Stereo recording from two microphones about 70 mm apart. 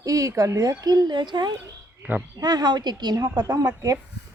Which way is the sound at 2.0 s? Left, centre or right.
Right.